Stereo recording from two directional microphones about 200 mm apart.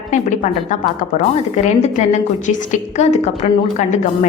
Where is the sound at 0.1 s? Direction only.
40° left (ahead or behind).